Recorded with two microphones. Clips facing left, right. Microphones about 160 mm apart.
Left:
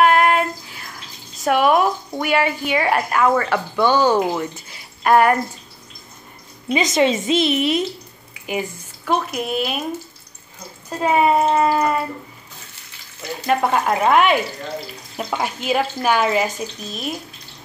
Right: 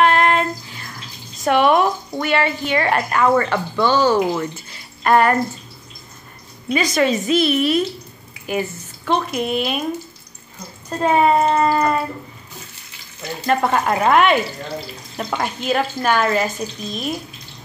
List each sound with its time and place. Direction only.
0.0 s a sound: 10° left (ahead or behind)
1.3 s speech: 5° left (ahead or behind)
6.7 s a woman's voice: 20° left (ahead or behind)
8.5 s speech: 10° left (ahead or behind)
10.9 s speech: 5° left (ahead or behind)
13.5 s speech: 5° left (ahead or behind)